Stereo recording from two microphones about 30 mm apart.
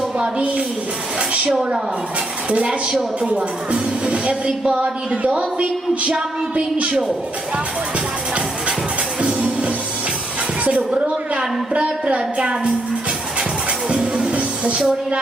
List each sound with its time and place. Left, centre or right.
0.2 s a woman's voice: right
1.5 s a woman's voice: centre
2.5 s a woman's voice: right
9.2 s music: right
11.7 s a woman's voice: right
13.8 s music: right
14.8 s speech: right